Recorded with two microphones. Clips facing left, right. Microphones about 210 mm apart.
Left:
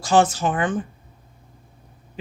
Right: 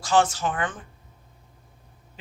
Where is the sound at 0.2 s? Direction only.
15° left (ahead or behind).